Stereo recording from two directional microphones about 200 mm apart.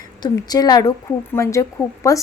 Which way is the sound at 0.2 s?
20° left (ahead or behind).